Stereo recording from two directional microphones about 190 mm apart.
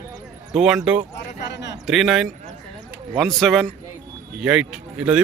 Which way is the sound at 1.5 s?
65° left (ahead or behind).